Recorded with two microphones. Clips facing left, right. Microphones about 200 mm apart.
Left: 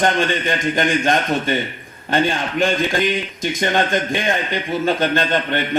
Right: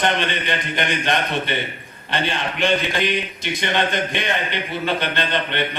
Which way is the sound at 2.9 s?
45° left (ahead or behind).